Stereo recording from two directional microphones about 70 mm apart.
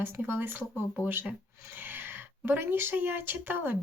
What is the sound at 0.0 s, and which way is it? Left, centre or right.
Speech, right.